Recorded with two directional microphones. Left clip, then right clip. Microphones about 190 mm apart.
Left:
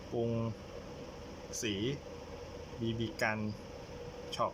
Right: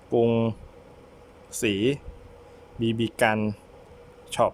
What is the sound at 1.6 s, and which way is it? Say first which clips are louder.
Speech: right 13 dB; 45° right (ahead or behind).